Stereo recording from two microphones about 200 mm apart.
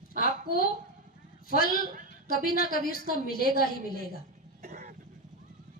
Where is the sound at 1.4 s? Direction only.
45° left (ahead or behind).